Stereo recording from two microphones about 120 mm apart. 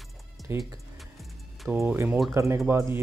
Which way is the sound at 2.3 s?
25° right (ahead or behind).